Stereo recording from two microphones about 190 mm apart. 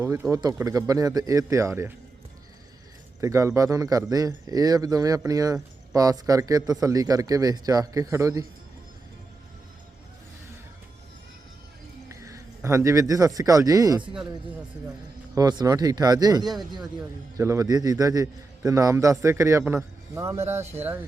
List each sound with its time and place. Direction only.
0.0 s a man's voice: 15° right (ahead or behind)
3.2 s speech: 15° right (ahead or behind)
12.0 s speech: 15° right (ahead or behind)
15.4 s a man's voice: 20° right (ahead or behind)